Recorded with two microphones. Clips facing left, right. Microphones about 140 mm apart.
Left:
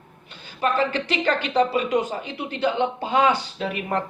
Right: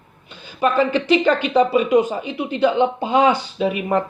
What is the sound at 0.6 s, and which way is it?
Speech, 15° right (ahead or behind).